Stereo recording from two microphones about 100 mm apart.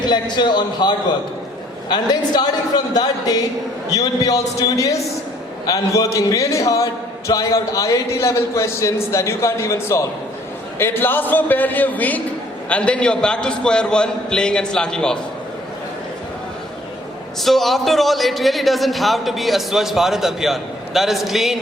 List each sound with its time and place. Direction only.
0.0 s a man's voice: 50° left (ahead or behind); by 15.2 s 5° left (ahead or behind)
17.4 s a man's voice: centre (ahead or behind)